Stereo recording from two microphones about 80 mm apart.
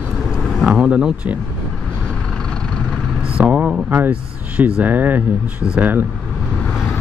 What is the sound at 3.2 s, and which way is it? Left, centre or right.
Vehicle, centre.